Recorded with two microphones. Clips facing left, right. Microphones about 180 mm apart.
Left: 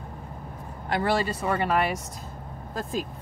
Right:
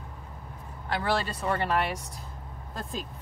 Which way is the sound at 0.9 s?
15° left (ahead or behind).